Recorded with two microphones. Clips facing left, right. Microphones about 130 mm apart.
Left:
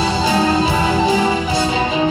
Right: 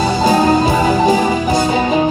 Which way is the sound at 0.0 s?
45° right (ahead or behind).